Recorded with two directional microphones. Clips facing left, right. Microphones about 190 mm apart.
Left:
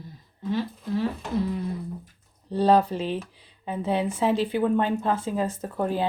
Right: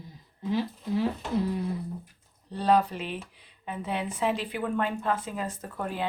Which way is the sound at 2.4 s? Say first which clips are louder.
Left 4 dB; 30° left (ahead or behind).